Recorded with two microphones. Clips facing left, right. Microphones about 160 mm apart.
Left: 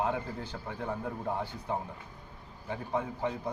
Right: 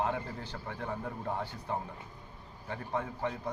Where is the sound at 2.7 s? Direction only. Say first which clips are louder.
Left 2 dB; 15° left (ahead or behind).